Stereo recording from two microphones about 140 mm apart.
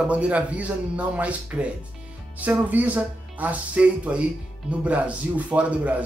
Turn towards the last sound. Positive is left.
turn(degrees=-10)  # may be behind; listen again after turning